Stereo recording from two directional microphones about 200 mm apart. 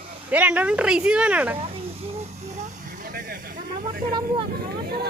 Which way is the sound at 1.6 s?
30° right (ahead or behind).